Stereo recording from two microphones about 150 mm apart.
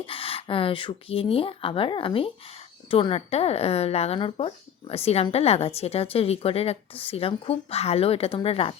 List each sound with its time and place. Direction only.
0.0 s speech: 35° left (ahead or behind)